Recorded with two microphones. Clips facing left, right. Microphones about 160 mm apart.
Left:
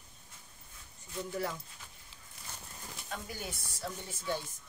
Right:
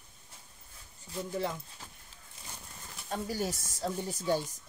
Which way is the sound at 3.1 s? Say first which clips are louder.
Right 9 dB; 35° right (ahead or behind).